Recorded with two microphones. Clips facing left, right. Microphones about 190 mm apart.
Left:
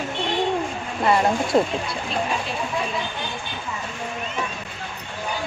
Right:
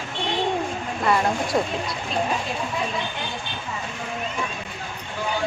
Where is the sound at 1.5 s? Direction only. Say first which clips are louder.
Left 5 dB; 25° left (ahead or behind).